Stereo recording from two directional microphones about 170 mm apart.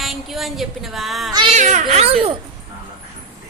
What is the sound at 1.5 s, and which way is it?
Speech, 45° right (ahead or behind).